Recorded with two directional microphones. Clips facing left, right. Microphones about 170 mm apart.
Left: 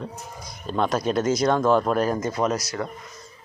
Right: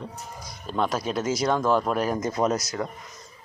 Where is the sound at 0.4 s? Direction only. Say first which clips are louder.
Left 2 dB; 5° right (ahead or behind).